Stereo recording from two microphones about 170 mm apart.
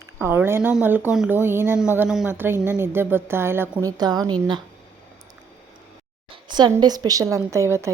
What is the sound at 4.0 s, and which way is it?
Speech, 25° right (ahead or behind).